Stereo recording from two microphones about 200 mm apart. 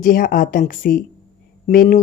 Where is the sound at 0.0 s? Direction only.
45° left (ahead or behind).